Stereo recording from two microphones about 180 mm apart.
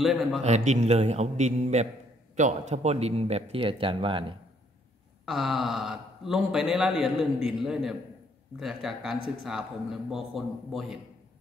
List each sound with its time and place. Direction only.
0.0 s speech: centre (ahead or behind)
0.4 s speech: 40° right (ahead or behind)
5.2 s speech: centre (ahead or behind)